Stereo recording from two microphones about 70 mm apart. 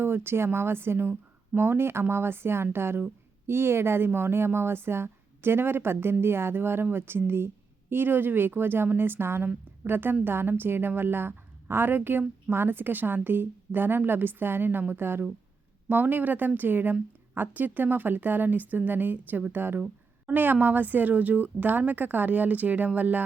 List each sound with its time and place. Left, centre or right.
0.0 s a woman's voice: right